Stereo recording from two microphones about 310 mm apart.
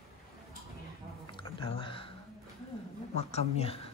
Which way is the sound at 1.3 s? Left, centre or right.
Centre.